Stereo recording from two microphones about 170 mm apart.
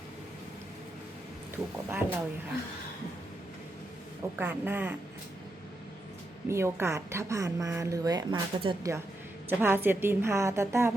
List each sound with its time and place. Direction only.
1.9 s a woman's voice: 10° right (ahead or behind)
4.4 s a woman's voice: 10° right (ahead or behind)
6.5 s speech: 15° right (ahead or behind)
9.5 s a woman's voice: 10° right (ahead or behind)